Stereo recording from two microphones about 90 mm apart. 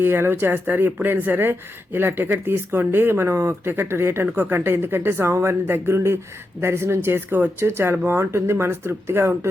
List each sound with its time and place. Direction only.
0.0 s speech: 25° right (ahead or behind)